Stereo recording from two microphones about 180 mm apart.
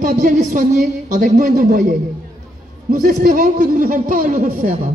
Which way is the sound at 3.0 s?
50° right (ahead or behind).